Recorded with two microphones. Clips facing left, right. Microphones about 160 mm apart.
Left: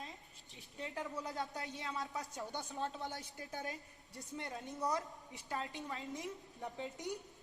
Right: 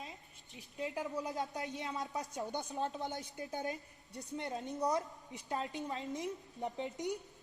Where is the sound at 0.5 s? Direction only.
15° right (ahead or behind).